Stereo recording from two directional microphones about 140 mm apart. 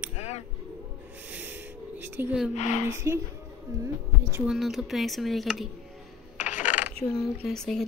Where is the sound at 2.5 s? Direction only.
55° left (ahead or behind).